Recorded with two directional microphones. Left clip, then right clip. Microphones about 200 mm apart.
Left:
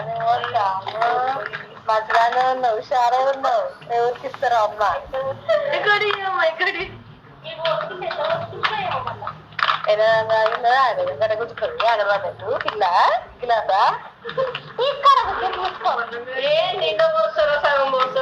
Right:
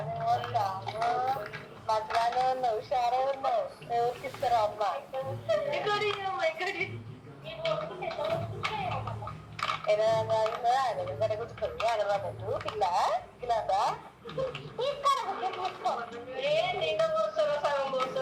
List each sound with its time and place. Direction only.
0.1 s speech: 20° left (ahead or behind)